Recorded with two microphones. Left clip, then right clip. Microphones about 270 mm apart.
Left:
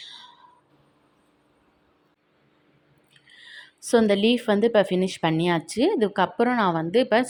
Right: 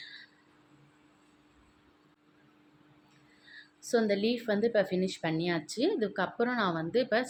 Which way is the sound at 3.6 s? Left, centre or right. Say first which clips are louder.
Left 9 dB; left.